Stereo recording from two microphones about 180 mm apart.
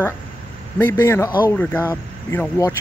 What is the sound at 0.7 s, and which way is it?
Speech, 10° left (ahead or behind).